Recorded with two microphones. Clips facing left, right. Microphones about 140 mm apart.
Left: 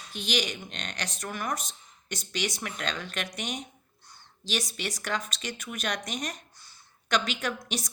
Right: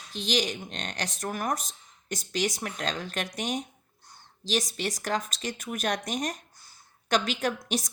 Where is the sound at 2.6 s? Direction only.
35° right (ahead or behind).